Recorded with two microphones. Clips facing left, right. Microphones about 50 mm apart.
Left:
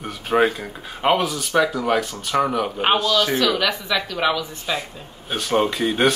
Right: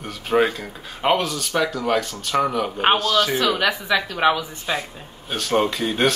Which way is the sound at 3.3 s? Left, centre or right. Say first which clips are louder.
Even; centre.